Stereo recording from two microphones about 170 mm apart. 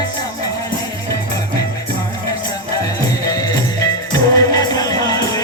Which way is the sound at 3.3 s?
20° left (ahead or behind).